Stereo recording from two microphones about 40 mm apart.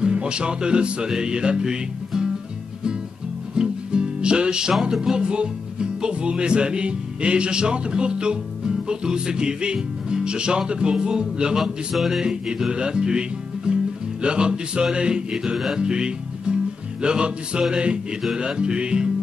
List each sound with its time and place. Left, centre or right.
0.0 s speech: right
3.5 s music: right
5.1 s speech: right
11.6 s speech: centre
12.2 s music: centre
14.2 s speech: right
15.7 s music: centre
17.0 s speech: right